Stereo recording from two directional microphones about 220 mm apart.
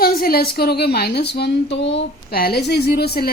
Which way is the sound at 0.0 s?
40° left (ahead or behind).